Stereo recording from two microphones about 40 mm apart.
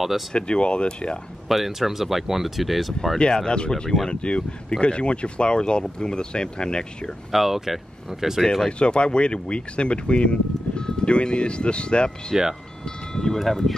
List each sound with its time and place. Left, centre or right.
0.3 s speech: left
1.5 s speech: centre
3.2 s speech: centre
7.3 s speech: centre
8.6 s speech: left
12.3 s speech: centre
12.8 s chime: centre
13.4 s speech: centre